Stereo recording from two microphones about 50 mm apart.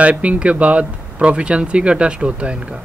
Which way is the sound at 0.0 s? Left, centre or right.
Right.